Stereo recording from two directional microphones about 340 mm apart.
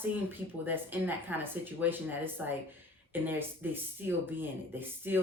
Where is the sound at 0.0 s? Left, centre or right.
Centre.